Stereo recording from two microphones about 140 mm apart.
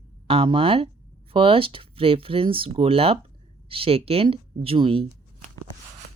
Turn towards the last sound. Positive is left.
turn(degrees=-40)  # may be behind; listen again after turning